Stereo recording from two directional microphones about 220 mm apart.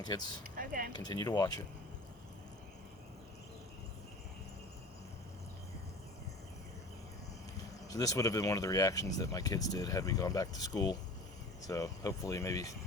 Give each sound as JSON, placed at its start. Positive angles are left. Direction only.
{"t": 0.5, "sound": "a sound", "side_deg": -40}
{"t": 0.9, "sound": "speech", "side_deg": 20}
{"t": 7.9, "sound": "speech", "side_deg": 15}